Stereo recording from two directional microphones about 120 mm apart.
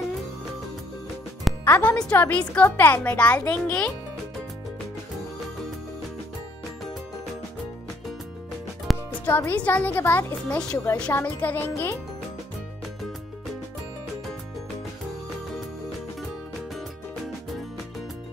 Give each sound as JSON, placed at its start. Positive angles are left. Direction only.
{"t": 1.6, "sound": "speech", "side_deg": 15}
{"t": 8.9, "sound": "music", "side_deg": 0}
{"t": 9.2, "sound": "speech", "side_deg": 15}